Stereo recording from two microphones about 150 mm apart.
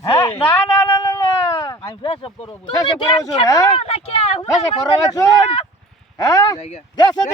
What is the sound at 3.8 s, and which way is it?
Speech, 45° left (ahead or behind).